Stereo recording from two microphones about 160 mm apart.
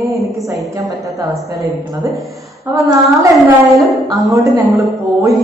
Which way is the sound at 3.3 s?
Centre (ahead or behind).